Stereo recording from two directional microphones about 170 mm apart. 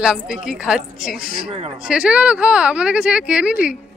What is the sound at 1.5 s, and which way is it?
Speech, 35° right (ahead or behind).